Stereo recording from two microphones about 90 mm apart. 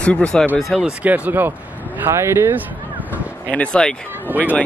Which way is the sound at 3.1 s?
15° left (ahead or behind).